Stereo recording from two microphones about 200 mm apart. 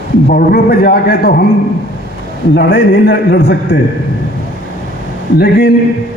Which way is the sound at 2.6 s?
60° left (ahead or behind).